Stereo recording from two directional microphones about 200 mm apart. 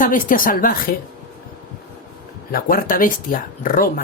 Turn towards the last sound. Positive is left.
turn(degrees=45)  # may be behind; listen again after turning